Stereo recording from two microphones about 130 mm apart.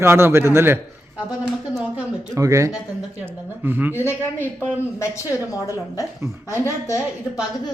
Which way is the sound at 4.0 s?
15° left (ahead or behind).